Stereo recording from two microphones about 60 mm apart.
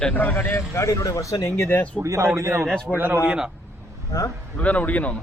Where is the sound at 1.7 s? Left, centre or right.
Left.